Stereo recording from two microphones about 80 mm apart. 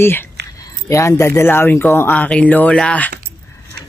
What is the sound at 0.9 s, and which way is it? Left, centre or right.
Speech, left.